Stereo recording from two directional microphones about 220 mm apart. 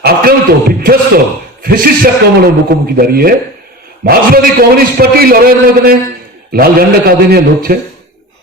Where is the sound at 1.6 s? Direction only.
40° right (ahead or behind).